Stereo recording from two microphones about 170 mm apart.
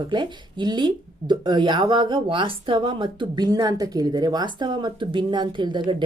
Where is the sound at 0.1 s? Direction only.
25° right (ahead or behind).